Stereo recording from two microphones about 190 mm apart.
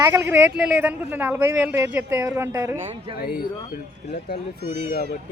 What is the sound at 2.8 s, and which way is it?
Speech, 30° right (ahead or behind).